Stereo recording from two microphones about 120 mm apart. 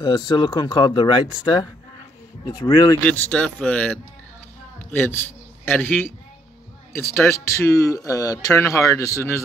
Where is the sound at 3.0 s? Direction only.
10° left (ahead or behind).